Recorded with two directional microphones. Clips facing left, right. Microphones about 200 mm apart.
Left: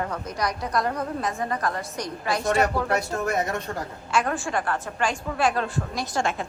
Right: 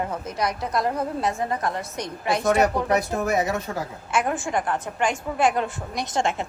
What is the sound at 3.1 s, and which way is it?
Speech, centre (ahead or behind).